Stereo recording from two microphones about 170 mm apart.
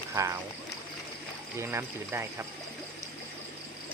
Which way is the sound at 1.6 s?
15° right (ahead or behind).